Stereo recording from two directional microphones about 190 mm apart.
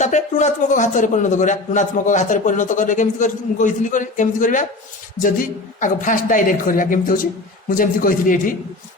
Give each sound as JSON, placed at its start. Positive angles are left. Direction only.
{"t": 0.0, "sound": "a man's voice", "side_deg": 40}